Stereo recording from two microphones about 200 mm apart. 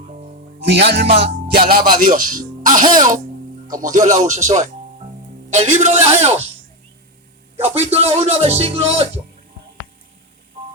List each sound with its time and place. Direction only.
0.6 s speech: 55° right (ahead or behind)
1.2 s music: 55° right (ahead or behind)
1.7 s speech: 45° right (ahead or behind)
7.6 s speech: 30° right (ahead or behind)